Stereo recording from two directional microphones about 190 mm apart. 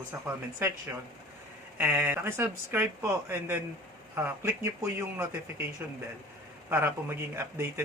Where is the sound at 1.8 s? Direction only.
10° right (ahead or behind).